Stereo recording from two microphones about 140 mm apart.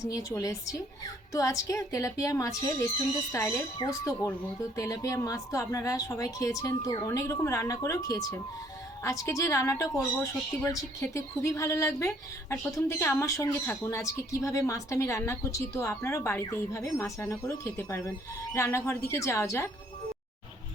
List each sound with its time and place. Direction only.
0.0 s speech: 25° left (ahead or behind)